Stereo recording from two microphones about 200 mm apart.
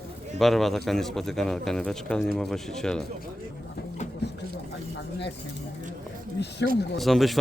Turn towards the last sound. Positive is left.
turn(degrees=0)  # may be behind; listen again after turning